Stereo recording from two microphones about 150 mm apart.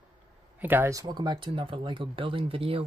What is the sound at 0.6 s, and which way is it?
Speech, 15° right (ahead or behind).